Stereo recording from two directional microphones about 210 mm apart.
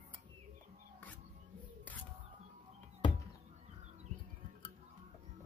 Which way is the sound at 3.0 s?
20° left (ahead or behind).